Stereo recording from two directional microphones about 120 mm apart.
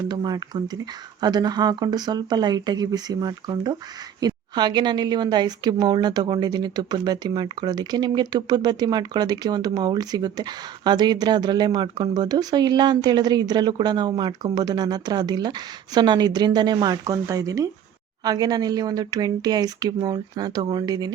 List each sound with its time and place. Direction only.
0.1 s a woman's voice: 35° right (ahead or behind)